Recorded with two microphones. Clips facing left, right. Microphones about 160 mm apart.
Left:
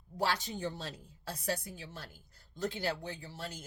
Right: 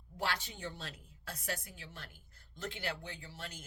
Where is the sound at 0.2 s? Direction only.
40° left (ahead or behind).